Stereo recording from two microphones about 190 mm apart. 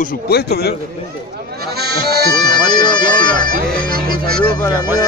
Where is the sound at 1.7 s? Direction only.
55° right (ahead or behind).